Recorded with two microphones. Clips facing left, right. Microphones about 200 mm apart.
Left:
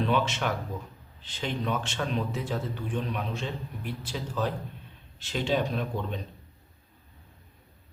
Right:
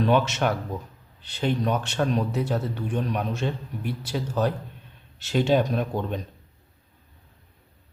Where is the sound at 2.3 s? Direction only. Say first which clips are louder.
Right 6 dB; 65° right (ahead or behind).